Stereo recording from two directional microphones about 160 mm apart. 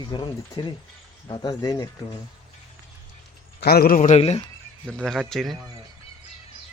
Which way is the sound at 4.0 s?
45° left (ahead or behind).